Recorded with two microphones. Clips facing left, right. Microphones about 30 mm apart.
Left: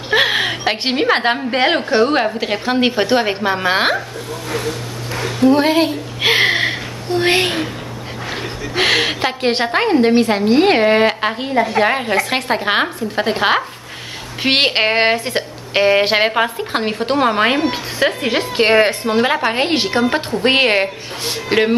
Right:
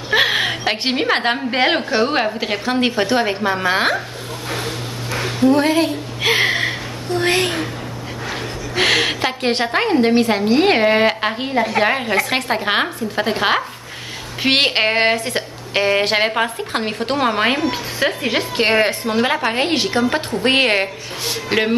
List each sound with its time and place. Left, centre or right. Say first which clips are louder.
0.1 s a woman's voice: left 1 dB; centre
2.6 s speech: left 2 dB; centre
4.5 s dog: left 2 dB; centre
5.5 s a sound: left 2 dB; left
8.3 s a woman's voice: left 2 dB; centre